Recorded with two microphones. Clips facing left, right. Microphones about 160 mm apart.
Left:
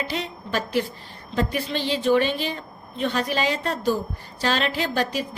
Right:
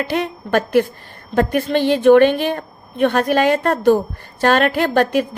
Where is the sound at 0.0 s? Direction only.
55° right (ahead or behind).